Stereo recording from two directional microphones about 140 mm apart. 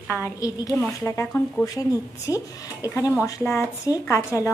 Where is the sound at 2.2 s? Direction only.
25° left (ahead or behind).